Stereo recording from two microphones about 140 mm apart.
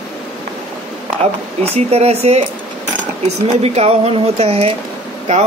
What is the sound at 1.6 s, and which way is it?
Speech, 50° right (ahead or behind).